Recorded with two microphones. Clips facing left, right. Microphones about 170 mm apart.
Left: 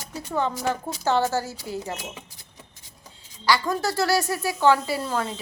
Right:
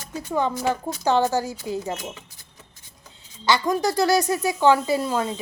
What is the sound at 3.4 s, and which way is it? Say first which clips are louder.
Speech: right 2 dB; 20° right (ahead or behind).